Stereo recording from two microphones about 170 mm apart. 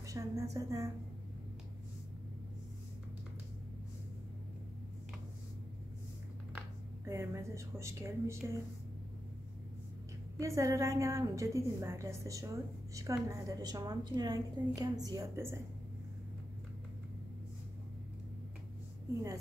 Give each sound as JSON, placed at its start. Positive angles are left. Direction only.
{"t": 0.0, "sound": "a woman's voice", "side_deg": -20}
{"t": 7.1, "sound": "a woman's voice", "side_deg": -15}
{"t": 10.4, "sound": "a woman's voice", "side_deg": -20}